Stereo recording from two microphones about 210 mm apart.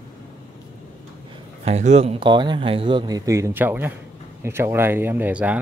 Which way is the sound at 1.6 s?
30° right (ahead or behind).